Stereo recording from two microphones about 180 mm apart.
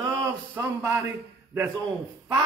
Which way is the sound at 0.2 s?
10° right (ahead or behind).